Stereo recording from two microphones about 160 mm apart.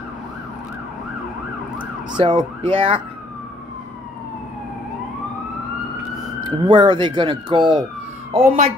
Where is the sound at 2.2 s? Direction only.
30° right (ahead or behind).